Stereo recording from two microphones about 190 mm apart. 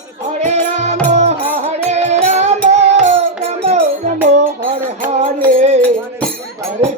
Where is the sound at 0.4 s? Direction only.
40° right (ahead or behind).